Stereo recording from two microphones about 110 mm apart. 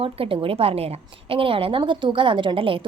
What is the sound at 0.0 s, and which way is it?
A woman's voice, 55° right (ahead or behind).